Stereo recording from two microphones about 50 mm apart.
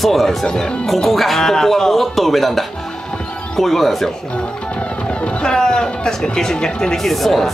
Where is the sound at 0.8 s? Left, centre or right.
Centre.